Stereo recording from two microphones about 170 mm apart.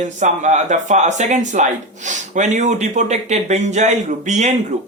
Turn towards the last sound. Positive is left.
turn(degrees=-45)  # may be behind; listen again after turning